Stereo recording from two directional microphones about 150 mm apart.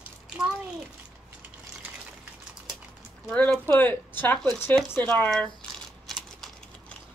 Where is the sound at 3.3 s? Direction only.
10° left (ahead or behind).